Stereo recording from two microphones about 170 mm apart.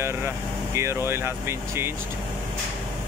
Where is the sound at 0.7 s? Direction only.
15° right (ahead or behind).